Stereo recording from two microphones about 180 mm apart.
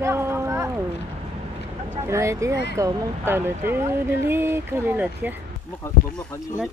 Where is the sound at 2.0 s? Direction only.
15° right (ahead or behind).